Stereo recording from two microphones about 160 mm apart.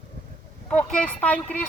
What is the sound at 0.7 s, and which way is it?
Speech, 5° left (ahead or behind).